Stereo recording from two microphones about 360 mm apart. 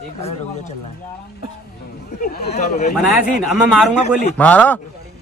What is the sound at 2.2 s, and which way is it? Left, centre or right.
Speech, left.